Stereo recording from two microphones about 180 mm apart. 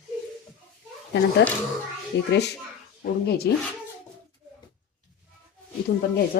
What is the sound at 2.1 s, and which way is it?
Speech, 75° left (ahead or behind).